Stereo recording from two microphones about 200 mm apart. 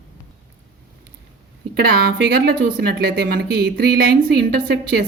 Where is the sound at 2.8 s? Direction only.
55° right (ahead or behind).